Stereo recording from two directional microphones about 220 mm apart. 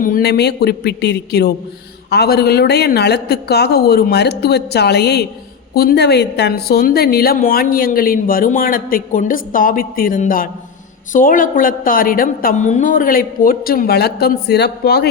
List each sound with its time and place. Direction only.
0.0 s a woman's voice: 45° left (ahead or behind)